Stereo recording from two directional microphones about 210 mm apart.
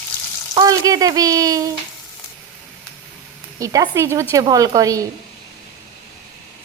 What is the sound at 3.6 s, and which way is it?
A woman's voice, 15° right (ahead or behind).